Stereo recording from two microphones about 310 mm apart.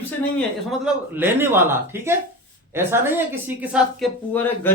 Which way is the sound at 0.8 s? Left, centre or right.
Centre.